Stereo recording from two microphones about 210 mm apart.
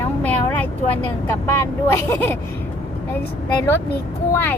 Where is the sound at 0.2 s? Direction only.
5° left (ahead or behind).